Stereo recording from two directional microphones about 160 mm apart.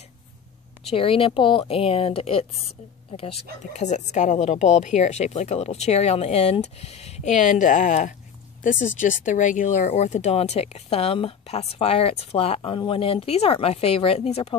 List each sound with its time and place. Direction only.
0.8 s speech: 35° left (ahead or behind)
3.7 s speech: 45° left (ahead or behind)